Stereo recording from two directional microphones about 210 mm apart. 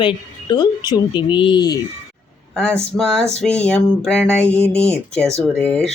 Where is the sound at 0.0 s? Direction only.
20° left (ahead or behind).